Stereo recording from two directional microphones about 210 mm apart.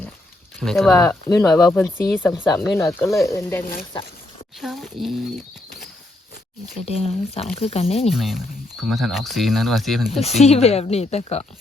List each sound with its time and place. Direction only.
0.6 s speech: centre (ahead or behind)
4.6 s speech: centre (ahead or behind)
6.7 s speech: 30° left (ahead or behind)
8.1 s speech: centre (ahead or behind)
10.4 s speech: 30° left (ahead or behind)